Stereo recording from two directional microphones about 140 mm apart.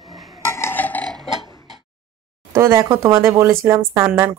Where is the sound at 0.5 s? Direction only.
15° left (ahead or behind).